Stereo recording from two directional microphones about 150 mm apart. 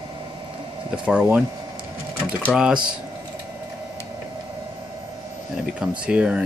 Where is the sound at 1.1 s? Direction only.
5° right (ahead or behind).